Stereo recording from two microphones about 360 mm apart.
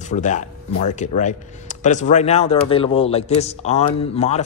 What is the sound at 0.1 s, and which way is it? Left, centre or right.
Speech, centre.